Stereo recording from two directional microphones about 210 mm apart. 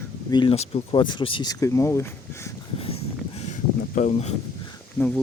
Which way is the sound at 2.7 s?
25° left (ahead or behind).